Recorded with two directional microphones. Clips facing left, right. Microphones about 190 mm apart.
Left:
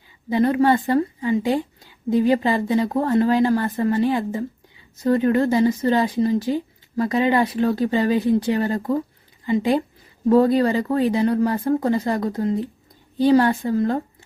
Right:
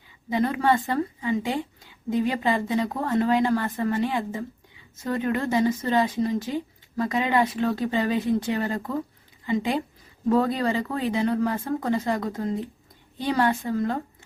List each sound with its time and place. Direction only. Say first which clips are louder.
0.3 s speech: left 5 dB; 35° left (ahead or behind)
10.2 s a woman's voice: left 6 dB; 35° left (ahead or behind)